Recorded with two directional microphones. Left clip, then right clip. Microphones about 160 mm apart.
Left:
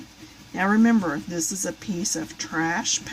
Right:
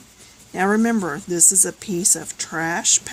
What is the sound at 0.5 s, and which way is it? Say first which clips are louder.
Speech: right 2 dB; 55° right (ahead or behind).